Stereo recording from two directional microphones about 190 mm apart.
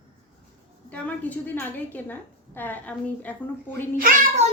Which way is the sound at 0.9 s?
5° left (ahead or behind).